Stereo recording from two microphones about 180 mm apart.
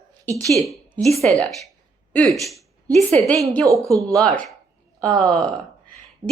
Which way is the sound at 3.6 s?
20° right (ahead or behind).